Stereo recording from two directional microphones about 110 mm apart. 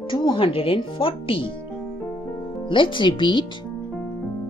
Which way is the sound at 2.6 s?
50° left (ahead or behind).